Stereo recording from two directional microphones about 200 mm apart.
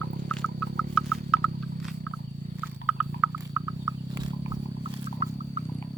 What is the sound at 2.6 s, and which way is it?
Rodents, 5° right (ahead or behind).